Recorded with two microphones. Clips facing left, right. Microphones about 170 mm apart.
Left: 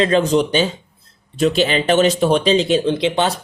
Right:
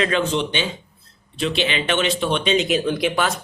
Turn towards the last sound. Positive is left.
turn(degrees=25)  # may be behind; listen again after turning